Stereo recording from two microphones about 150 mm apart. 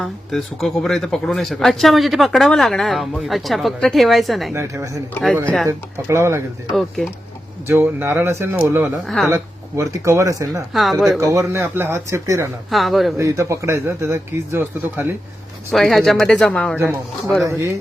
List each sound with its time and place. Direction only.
0.0 s speech: centre (ahead or behind)
4.5 s speech: 20° right (ahead or behind)
6.7 s speech: centre (ahead or behind)
7.7 s speech: 15° right (ahead or behind)
9.0 s speech: centre (ahead or behind)
9.3 s speech: 20° right (ahead or behind)
10.7 s speech: centre (ahead or behind)
11.2 s speech: 20° right (ahead or behind)
12.7 s speech: centre (ahead or behind)
13.1 s speech: 20° right (ahead or behind)
15.7 s speech: centre (ahead or behind)
16.7 s speech: 15° right (ahead or behind)